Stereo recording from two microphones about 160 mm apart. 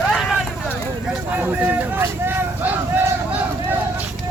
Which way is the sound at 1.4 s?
10° right (ahead or behind).